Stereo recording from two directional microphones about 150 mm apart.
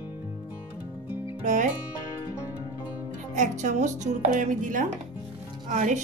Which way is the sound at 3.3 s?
55° right (ahead or behind).